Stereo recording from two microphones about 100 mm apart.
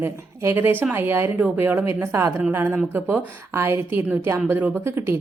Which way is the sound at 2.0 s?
30° right (ahead or behind).